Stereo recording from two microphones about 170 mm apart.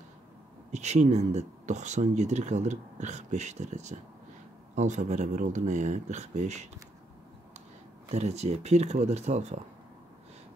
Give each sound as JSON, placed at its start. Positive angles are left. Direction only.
{"t": 0.7, "sound": "speech", "side_deg": -40}
{"t": 8.1, "sound": "speech", "side_deg": -40}